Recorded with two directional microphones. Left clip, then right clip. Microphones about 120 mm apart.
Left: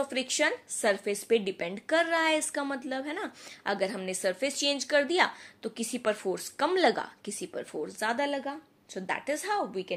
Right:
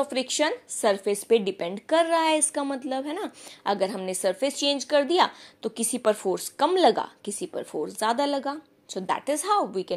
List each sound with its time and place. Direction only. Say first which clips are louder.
0.0 s a woman's voice: right 3 dB; 30° right (ahead or behind); by 9.9 s 45° right (ahead or behind)